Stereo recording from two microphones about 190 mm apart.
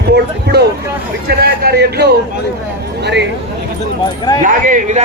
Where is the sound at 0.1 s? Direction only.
55° right (ahead or behind).